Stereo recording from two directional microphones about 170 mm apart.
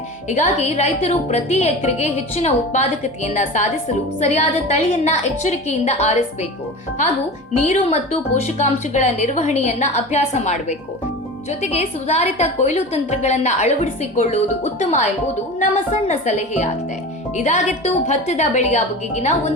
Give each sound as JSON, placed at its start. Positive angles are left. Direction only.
{"t": 0.3, "sound": "a woman's voice", "side_deg": 45}
{"t": 7.5, "sound": "a woman's voice", "side_deg": 45}